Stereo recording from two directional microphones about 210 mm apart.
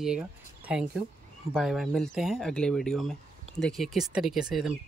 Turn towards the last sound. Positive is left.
turn(degrees=0)  # may be behind; listen again after turning